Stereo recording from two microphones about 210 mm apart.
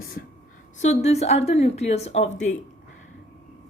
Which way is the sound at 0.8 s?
30° left (ahead or behind).